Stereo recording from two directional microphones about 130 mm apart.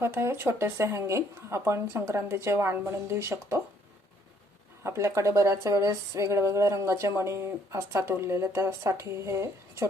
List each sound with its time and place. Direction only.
0.0 s speech: 20° right (ahead or behind)
4.8 s speech: 20° right (ahead or behind)